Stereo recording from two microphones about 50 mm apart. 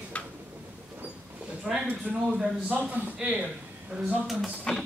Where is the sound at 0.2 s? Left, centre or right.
Left.